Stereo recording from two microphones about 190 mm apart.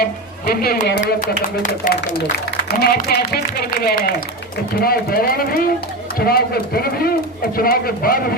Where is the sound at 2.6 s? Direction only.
55° left (ahead or behind).